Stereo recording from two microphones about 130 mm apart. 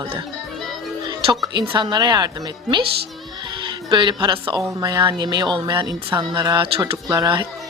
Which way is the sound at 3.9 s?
35° right (ahead or behind).